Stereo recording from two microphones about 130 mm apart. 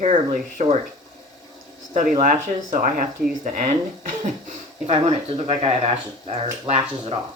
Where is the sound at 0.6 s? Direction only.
60° right (ahead or behind).